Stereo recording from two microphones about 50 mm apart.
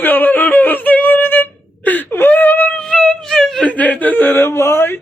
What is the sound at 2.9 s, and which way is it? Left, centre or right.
Music, centre.